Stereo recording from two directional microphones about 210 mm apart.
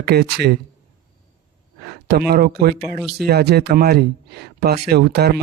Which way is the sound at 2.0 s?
50° right (ahead or behind).